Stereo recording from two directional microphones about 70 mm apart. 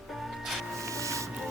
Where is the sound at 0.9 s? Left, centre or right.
Right.